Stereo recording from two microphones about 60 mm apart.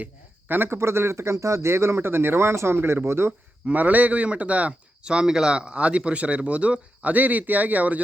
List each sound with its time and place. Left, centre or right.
0.0 s speech: right
3.7 s speech: right